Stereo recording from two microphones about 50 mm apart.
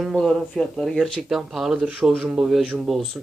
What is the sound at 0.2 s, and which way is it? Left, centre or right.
Speech, centre.